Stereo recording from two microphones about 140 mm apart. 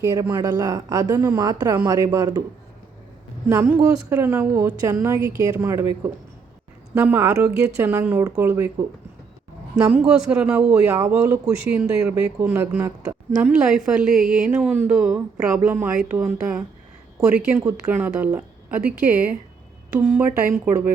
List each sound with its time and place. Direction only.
0.0 s speech: 20° right (ahead or behind)
3.5 s a man's voice: 10° right (ahead or behind)
9.7 s a man's voice: 5° right (ahead or behind)